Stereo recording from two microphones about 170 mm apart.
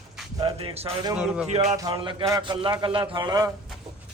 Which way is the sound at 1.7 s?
20° right (ahead or behind).